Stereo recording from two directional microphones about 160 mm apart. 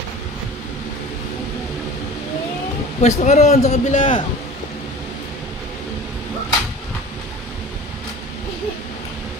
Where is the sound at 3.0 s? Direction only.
45° left (ahead or behind).